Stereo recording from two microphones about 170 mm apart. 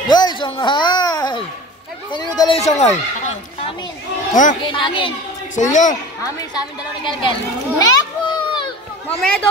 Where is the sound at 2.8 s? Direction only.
40° left (ahead or behind).